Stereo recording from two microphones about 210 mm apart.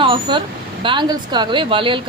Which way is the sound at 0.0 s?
25° right (ahead or behind).